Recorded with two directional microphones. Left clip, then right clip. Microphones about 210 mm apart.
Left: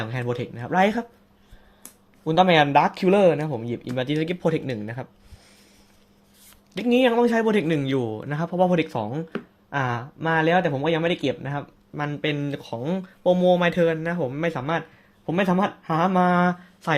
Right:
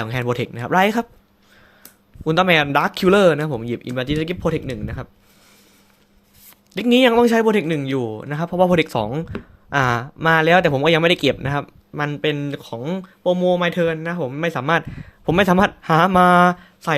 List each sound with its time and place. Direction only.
0.0 s a man's voice: 25° right (ahead or behind); by 5.0 s 10° right (ahead or behind)
6.7 s a man's voice: 30° right (ahead or behind)
14.6 s speech: 35° right (ahead or behind)